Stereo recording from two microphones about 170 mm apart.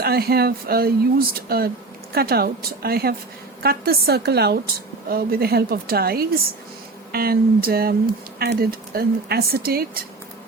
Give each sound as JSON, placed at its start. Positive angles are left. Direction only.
{"t": 0.0, "sound": "a woman's voice", "side_deg": -65}